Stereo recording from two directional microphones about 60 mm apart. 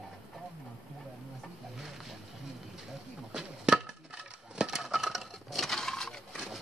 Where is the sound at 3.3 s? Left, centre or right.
Centre.